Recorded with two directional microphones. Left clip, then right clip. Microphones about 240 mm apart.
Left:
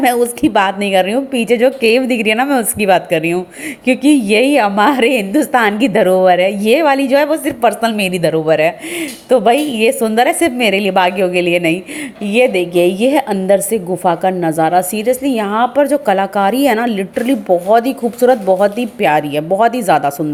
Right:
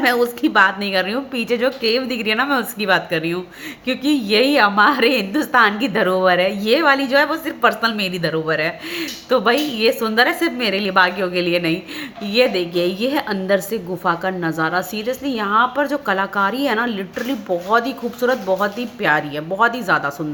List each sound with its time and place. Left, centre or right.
0.0 s a woman's voice: left